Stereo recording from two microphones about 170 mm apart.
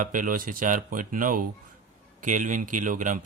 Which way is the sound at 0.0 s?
50° right (ahead or behind).